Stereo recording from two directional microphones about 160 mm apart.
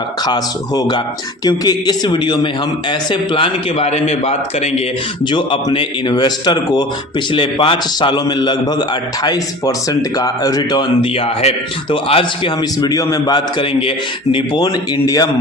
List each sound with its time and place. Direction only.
0.3 s a man's voice: 25° left (ahead or behind); by 4.8 s 40° left (ahead or behind)
5.2 s a man's voice: 30° left (ahead or behind)
12.8 s speech: 20° left (ahead or behind)